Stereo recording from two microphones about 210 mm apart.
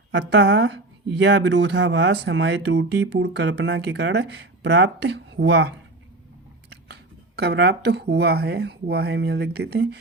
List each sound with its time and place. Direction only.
0.1 s speech: 55° right (ahead or behind)